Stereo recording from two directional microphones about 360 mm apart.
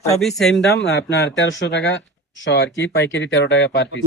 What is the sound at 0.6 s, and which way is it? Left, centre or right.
Speech, left.